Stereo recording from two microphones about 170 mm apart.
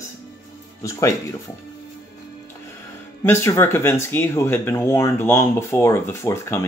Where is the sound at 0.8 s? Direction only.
20° left (ahead or behind).